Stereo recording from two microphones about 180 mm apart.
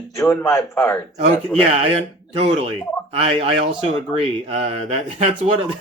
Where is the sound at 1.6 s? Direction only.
35° right (ahead or behind).